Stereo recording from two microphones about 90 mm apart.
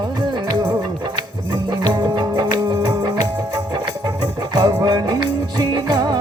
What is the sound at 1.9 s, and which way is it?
Music, 50° right (ahead or behind).